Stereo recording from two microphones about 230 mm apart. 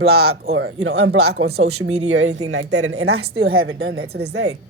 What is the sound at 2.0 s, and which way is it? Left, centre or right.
A woman's voice, right.